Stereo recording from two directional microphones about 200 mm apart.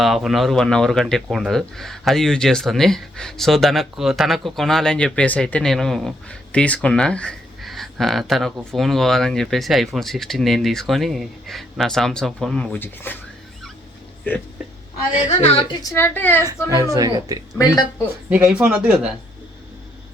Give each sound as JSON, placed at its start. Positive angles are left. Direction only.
{"t": 0.0, "sound": "speech", "side_deg": 0}
{"t": 15.4, "sound": "a woman's voice", "side_deg": 30}
{"t": 15.8, "sound": "speech", "side_deg": 15}
{"t": 16.9, "sound": "speech", "side_deg": -15}
{"t": 17.6, "sound": "speech", "side_deg": 20}
{"t": 18.3, "sound": "speech", "side_deg": -5}